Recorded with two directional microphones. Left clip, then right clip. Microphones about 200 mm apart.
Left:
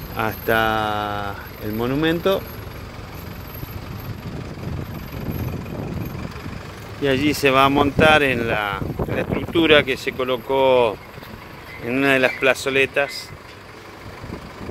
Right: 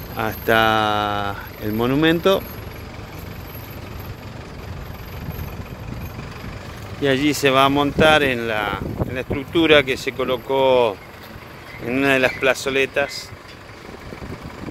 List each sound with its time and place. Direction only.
0.2 s speech: centre (ahead or behind)
0.6 s speech: 15° right (ahead or behind)
7.0 s speech: 5° right (ahead or behind)